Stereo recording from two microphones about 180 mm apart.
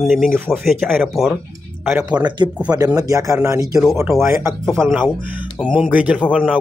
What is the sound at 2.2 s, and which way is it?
Speech, 25° right (ahead or behind).